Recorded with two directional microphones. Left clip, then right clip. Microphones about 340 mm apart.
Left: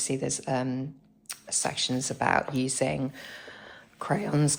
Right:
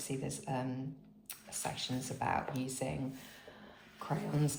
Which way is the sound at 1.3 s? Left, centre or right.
Centre.